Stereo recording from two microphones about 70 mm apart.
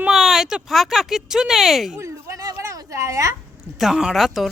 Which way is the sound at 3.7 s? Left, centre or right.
Centre.